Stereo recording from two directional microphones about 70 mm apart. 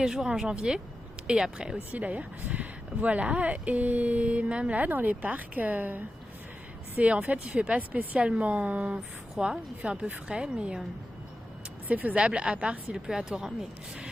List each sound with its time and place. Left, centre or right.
0.0 s a woman's voice: centre
11.9 s a woman's voice: right